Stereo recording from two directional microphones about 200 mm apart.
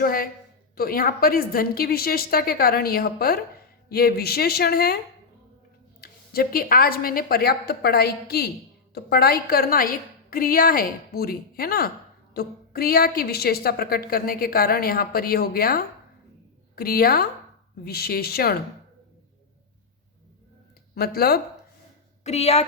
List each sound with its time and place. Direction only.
0.0 s a woman's voice: 45° left (ahead or behind)
6.0 s a woman's voice: 50° left (ahead or behind)
20.9 s a woman's voice: 50° left (ahead or behind)
22.2 s a woman's voice: 35° left (ahead or behind)